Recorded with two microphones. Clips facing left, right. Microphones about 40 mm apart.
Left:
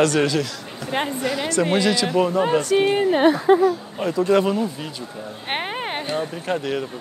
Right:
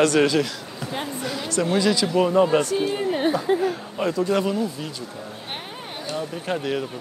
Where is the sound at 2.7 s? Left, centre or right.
Left.